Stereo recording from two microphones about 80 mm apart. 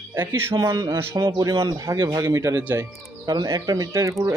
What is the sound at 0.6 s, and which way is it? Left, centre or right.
Speech, right.